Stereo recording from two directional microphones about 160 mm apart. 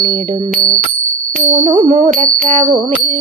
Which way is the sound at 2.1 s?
55° right (ahead or behind).